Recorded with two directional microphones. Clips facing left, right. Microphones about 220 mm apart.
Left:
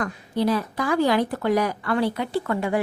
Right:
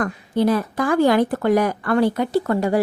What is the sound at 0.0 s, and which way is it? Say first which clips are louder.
A woman's voice: right 4 dB; 50° right (ahead or behind).